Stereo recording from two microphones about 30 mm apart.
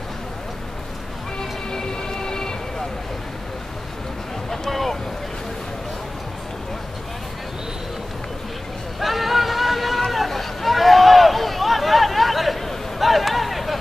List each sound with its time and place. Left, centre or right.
1.4 s music: centre
4.5 s vehicle: centre
9.0 s a sound: centre